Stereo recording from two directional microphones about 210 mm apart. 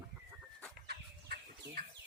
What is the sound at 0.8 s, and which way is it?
Chicken, 50° right (ahead or behind).